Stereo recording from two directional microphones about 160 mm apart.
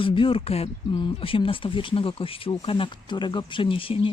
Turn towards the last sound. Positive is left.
turn(degrees=35)  # may be behind; listen again after turning